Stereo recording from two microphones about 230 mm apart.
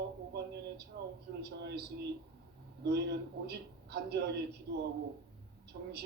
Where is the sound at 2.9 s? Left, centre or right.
Right.